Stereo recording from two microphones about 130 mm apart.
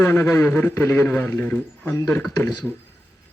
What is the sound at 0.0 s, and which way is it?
Speech, 20° left (ahead or behind).